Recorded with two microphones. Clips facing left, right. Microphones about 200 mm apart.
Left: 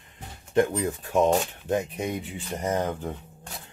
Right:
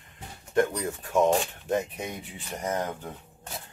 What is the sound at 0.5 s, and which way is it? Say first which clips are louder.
Speech: left 2 dB; 25° left (ahead or behind).